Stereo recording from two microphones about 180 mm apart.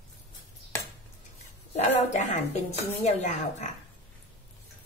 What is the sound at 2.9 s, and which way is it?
Speech, 40° left (ahead or behind).